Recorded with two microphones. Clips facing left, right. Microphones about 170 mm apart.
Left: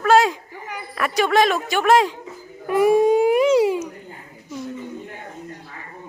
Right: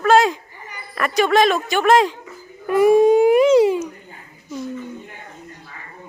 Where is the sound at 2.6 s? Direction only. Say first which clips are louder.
Right 3 dB; 5° left (ahead or behind).